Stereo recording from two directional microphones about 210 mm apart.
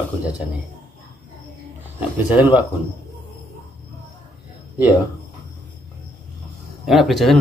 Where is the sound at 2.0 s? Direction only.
10° right (ahead or behind).